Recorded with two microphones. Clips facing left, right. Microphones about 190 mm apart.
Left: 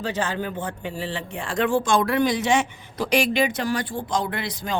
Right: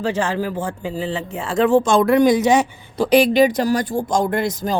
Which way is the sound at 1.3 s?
40° right (ahead or behind).